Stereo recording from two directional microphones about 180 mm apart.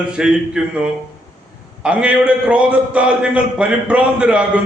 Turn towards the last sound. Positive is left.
turn(degrees=-5)  # may be behind; listen again after turning